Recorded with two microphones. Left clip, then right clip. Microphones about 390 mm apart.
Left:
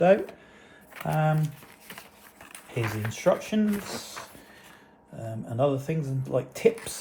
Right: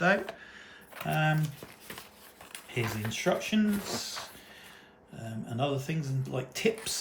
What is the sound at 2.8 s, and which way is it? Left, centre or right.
Speech, centre.